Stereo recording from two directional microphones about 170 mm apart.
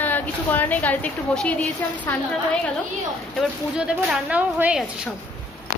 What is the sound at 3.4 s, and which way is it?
Speech, centre (ahead or behind).